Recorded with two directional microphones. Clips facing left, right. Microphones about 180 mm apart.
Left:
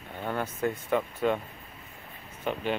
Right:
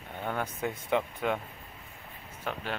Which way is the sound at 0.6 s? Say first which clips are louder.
Left 2 dB; 10° right (ahead or behind).